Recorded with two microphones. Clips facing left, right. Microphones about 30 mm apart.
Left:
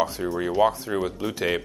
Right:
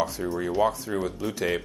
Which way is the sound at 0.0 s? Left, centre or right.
Centre.